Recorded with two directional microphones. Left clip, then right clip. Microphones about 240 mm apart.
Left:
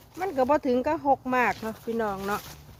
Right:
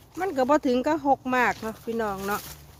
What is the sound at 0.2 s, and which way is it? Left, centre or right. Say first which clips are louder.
Speech: right 1 dB; centre.